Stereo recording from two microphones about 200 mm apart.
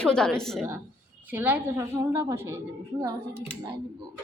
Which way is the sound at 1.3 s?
10° right (ahead or behind).